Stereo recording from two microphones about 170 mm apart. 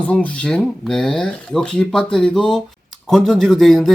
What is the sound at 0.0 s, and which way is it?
Speech, 10° left (ahead or behind).